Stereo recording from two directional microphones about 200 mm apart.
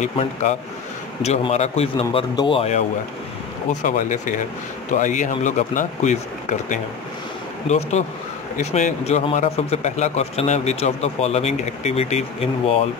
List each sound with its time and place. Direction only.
0.0 s a man's voice: 35° left (ahead or behind)
3.8 s a man's voice: 40° left (ahead or behind)